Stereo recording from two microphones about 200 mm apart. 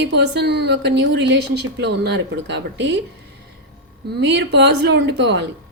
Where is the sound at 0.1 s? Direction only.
55° right (ahead or behind).